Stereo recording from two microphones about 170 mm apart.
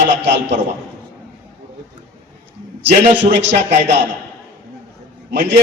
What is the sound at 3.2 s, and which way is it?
Speech, 90° right.